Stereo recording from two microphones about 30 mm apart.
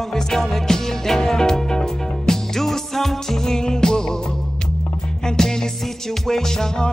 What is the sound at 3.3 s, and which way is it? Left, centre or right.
Music, left.